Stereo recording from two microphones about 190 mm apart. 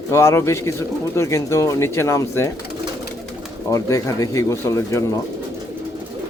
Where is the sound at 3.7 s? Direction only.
15° left (ahead or behind).